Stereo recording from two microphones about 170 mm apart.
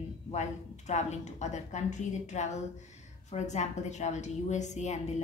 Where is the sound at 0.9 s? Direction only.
45° left (ahead or behind).